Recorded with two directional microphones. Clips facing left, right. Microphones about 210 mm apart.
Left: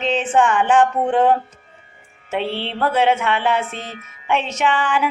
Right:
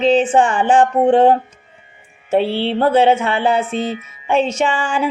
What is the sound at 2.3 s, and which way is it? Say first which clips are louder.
Speech: right 7 dB; 30° right (ahead or behind).